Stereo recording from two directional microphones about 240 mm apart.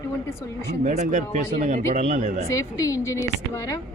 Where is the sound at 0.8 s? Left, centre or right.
Right.